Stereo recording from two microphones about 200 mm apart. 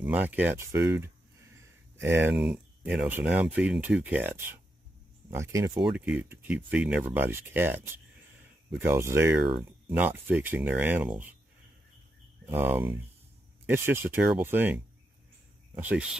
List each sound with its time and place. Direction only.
0.0 s speech: 5° right (ahead or behind)
0.7 s speech: 60° right (ahead or behind)
2.0 s speech: 10° right (ahead or behind)
5.9 s speech: 5° right (ahead or behind)
12.7 s speech: 20° right (ahead or behind)
13.7 s speech: 10° right (ahead or behind)
15.8 s speech: 5° right (ahead or behind)